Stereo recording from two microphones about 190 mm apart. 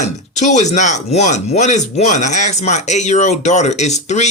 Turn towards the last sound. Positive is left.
turn(degrees=35)  # may be behind; listen again after turning